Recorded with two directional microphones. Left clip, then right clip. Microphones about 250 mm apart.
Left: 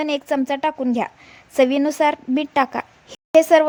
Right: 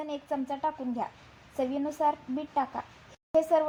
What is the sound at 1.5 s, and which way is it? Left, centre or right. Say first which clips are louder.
A woman's voice: left 14 dB; left.